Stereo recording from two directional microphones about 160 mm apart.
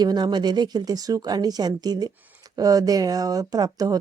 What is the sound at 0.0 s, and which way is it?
A woman's voice, 25° right (ahead or behind).